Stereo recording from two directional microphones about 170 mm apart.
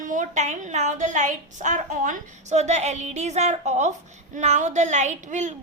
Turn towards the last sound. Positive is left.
turn(degrees=-45)  # may be behind; listen again after turning